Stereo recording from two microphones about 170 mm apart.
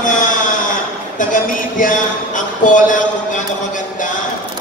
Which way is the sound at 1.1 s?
50° left (ahead or behind).